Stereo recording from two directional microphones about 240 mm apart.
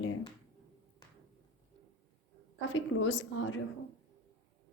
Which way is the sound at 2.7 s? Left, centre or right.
Left.